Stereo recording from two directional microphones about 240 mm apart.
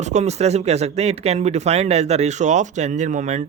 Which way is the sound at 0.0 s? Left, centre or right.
Right.